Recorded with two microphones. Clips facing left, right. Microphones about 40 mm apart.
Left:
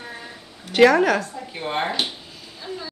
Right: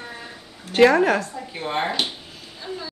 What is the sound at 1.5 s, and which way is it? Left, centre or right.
A woman's voice, centre.